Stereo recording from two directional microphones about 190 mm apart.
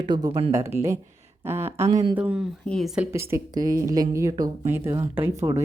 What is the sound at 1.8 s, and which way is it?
Speech, 30° right (ahead or behind).